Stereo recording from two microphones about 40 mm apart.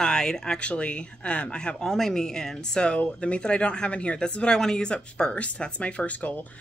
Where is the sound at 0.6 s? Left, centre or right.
Left.